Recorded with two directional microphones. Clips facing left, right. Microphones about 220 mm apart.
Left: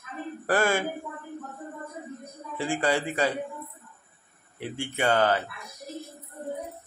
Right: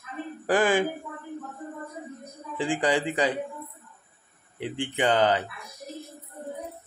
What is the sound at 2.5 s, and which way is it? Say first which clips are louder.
Speech: right 1 dB; 15° right (ahead or behind).